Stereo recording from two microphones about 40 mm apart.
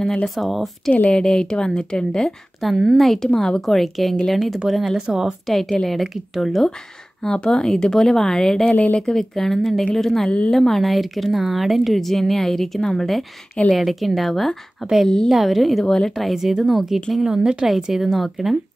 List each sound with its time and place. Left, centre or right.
0.0 s speech: centre
0.4 s a woman's voice: centre
1.1 s speech: centre
2.6 s a woman's voice: centre
4.9 s a woman's voice: centre
5.5 s a woman's voice: centre
8.6 s speech: left
9.1 s a woman's voice: centre
15.8 s speech: centre
16.3 s a woman's voice: centre
17.3 s a woman's voice: right
17.6 s a woman's voice: centre